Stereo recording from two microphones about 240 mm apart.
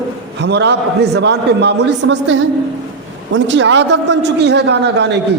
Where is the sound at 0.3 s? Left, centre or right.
Right.